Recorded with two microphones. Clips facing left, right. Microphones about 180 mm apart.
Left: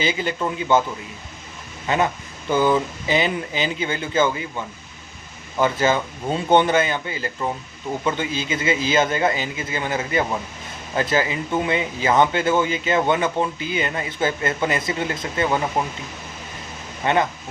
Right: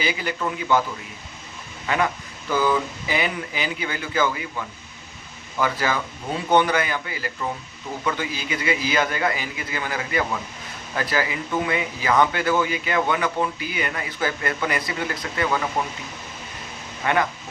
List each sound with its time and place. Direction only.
0.0 s speech: 25° left (ahead or behind)
1.9 s speech: 25° left (ahead or behind)
17.0 s speech: 25° left (ahead or behind)